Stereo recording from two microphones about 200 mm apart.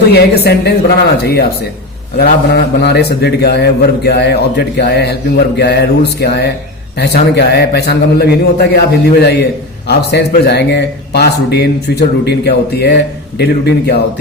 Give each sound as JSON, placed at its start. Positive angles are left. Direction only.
{"t": 0.1, "sound": "a man's voice", "side_deg": 55}